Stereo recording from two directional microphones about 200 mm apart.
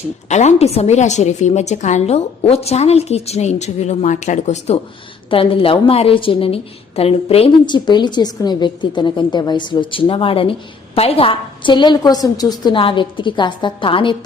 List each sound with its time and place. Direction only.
0.3 s a woman's voice: 35° left (ahead or behind)